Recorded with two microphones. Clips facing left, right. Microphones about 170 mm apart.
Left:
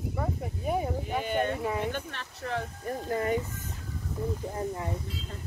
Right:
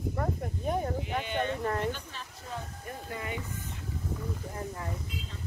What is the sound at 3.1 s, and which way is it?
Speech, 45° left (ahead or behind).